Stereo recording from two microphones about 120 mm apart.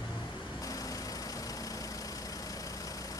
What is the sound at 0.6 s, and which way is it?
Vehicle, 30° left (ahead or behind).